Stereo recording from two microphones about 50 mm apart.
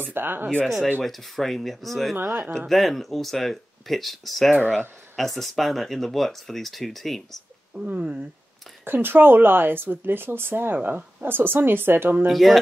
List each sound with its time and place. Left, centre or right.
0.0 s speech: right
1.0 s speech: centre
2.1 s speech: right
2.7 s speech: centre
7.7 s speech: right
8.8 s speech: right
12.3 s speech: centre